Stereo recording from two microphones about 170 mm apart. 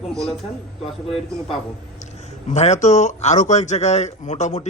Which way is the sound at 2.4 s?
40° left (ahead or behind).